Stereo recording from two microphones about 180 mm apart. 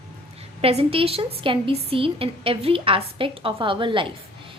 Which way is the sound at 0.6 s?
35° right (ahead or behind).